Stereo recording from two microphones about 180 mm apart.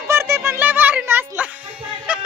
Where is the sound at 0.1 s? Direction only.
15° right (ahead or behind).